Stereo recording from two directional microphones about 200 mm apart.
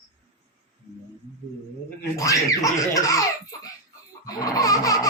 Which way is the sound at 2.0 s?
15° left (ahead or behind).